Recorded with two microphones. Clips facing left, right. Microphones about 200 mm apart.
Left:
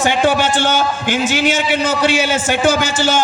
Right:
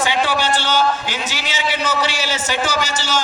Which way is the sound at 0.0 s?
50° left (ahead or behind).